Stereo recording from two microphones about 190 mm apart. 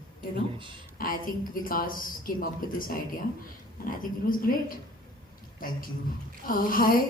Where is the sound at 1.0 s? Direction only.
50° left (ahead or behind).